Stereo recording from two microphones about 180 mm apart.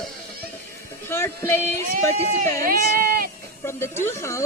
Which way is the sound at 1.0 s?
15° left (ahead or behind).